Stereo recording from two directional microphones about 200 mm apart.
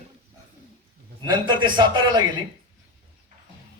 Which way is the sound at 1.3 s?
25° right (ahead or behind).